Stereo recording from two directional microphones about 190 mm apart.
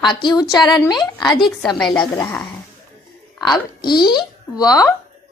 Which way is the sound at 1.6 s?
5° left (ahead or behind).